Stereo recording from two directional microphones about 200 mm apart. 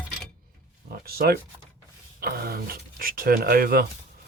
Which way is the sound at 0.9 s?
50° right (ahead or behind).